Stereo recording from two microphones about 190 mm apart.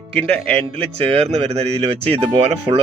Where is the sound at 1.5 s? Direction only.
30° right (ahead or behind).